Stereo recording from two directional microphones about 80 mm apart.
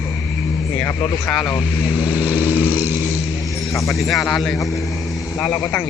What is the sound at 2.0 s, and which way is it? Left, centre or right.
Vehicle, centre.